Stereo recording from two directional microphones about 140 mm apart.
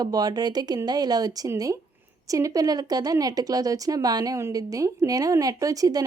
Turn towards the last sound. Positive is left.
turn(degrees=-25)  # may be behind; listen again after turning